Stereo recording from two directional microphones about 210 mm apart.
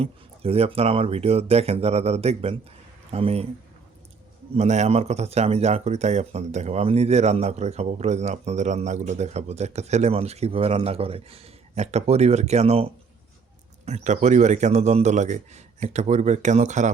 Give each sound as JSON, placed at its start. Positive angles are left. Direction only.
{"t": 0.0, "sound": "speech", "side_deg": -30}
{"t": 4.5, "sound": "a man's voice", "side_deg": -30}